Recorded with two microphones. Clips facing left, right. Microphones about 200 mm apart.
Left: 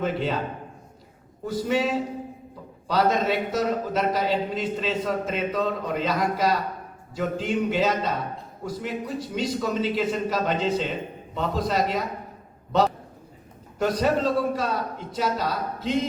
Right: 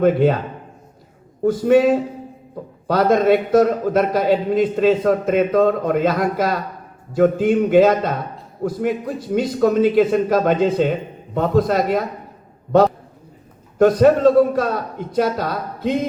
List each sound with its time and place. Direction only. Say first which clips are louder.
0.0 s a man's voice: right 11 dB; 55° right (ahead or behind)
1.5 s a man's voice: right 11 dB; 55° right (ahead or behind)
13.7 s a man's voice: right 10 dB; 55° right (ahead or behind)